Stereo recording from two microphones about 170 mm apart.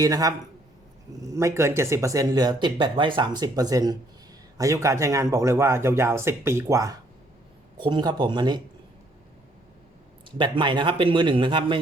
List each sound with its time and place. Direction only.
0.0 s a man's voice: 20° right (ahead or behind)
10.3 s speech: 30° right (ahead or behind)